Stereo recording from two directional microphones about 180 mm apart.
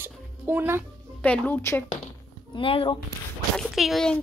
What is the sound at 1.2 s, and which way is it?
Speech, 10° left (ahead or behind).